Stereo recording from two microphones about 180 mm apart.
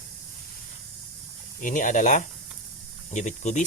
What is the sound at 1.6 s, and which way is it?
Speech, 45° left (ahead or behind).